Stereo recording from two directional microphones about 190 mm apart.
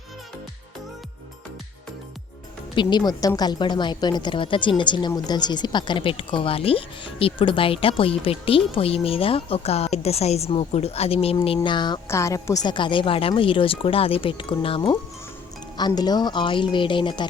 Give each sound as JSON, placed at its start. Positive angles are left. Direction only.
{"t": 2.7, "sound": "speech", "side_deg": 20}
{"t": 15.9, "sound": "speech", "side_deg": 20}